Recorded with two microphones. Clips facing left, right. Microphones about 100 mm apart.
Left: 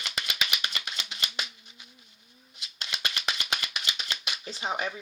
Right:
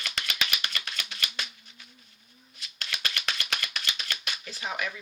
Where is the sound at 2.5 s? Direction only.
20° left (ahead or behind).